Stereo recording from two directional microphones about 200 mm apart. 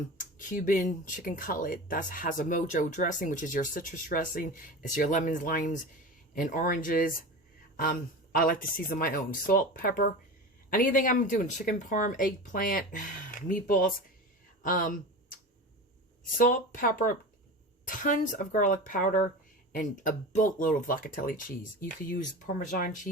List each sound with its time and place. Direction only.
0.2 s speech: 40° left (ahead or behind)
16.4 s speech: 45° left (ahead or behind)